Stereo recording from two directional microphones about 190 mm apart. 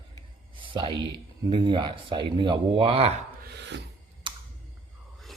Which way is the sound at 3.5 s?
65° right (ahead or behind).